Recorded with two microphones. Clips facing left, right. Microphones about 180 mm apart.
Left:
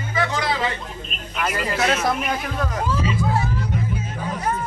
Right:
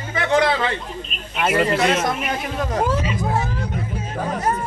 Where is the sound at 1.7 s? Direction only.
Centre (ahead or behind).